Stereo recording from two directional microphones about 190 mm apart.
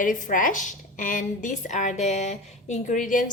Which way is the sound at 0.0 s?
45° left (ahead or behind).